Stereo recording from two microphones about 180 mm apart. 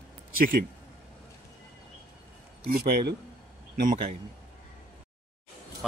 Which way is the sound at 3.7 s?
45° right (ahead or behind).